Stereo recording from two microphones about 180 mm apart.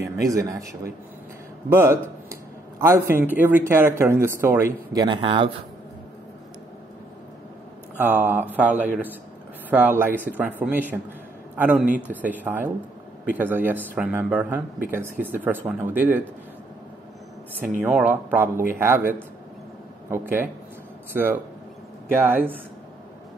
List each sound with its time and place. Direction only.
0.0 s speech: 20° right (ahead or behind)
5.0 s speech: 25° right (ahead or behind)
8.0 s a man's voice: 10° right (ahead or behind)
17.6 s speech: 10° right (ahead or behind)
22.1 s speech: 10° right (ahead or behind)